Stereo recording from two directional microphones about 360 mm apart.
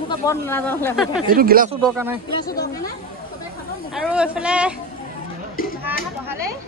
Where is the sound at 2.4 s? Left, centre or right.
Left.